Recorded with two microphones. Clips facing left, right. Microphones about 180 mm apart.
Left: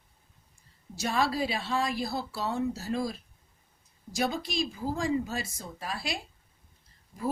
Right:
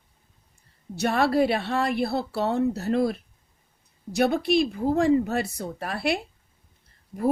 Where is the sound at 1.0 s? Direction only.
60° right (ahead or behind).